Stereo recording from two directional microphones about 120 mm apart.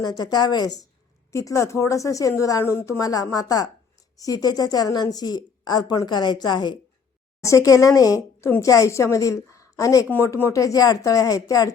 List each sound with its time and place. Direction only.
0.0 s a woman's voice: 35° left (ahead or behind)
1.3 s a woman's voice: 25° left (ahead or behind)
7.4 s speech: 25° left (ahead or behind)